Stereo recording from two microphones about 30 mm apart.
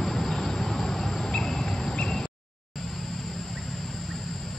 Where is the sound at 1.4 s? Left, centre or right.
Centre.